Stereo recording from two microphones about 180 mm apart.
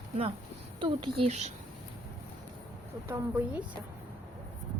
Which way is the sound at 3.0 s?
10° right (ahead or behind).